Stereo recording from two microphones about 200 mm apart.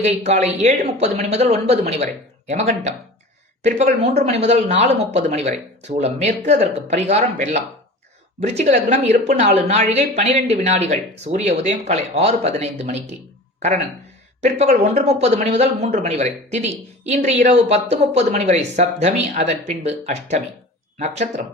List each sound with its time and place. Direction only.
0.0 s a woman's voice: 35° right (ahead or behind)
14.4 s a woman's voice: 35° right (ahead or behind)